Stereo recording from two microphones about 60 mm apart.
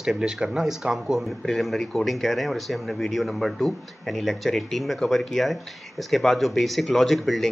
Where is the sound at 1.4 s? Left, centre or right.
Centre.